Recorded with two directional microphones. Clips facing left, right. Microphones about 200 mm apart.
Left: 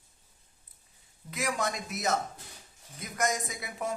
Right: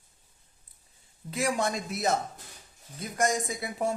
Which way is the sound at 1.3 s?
30° right (ahead or behind).